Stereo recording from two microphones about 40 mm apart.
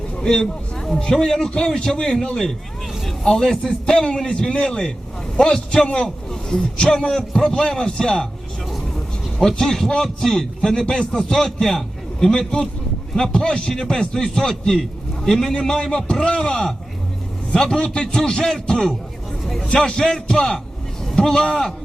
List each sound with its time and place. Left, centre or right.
0.2 s a man's voice: centre
9.4 s a man's voice: centre